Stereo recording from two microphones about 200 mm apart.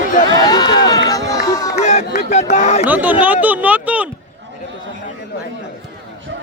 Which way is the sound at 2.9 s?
10° right (ahead or behind).